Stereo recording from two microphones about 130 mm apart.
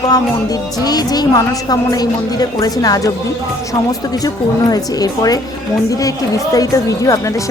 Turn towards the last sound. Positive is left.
turn(degrees=25)  # may be behind; listen again after turning